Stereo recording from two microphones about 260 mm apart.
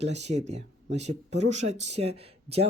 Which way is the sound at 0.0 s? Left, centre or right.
Right.